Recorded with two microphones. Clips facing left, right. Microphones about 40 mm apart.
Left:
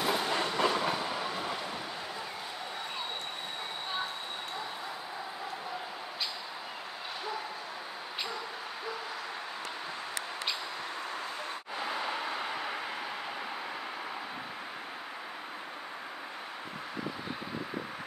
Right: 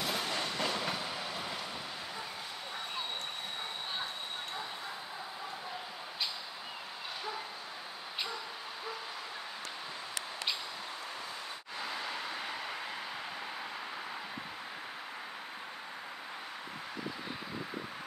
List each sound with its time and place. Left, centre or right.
0.0 s train: centre
11.8 s vehicle: left